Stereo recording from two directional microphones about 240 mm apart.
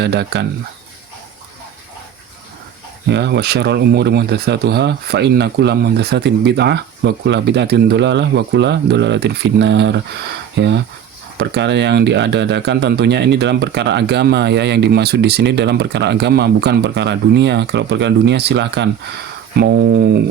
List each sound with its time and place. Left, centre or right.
0.0 s speech: right
3.1 s speech: right
11.3 s speech: right